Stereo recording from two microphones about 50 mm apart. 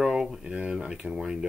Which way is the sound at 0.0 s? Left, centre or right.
Centre.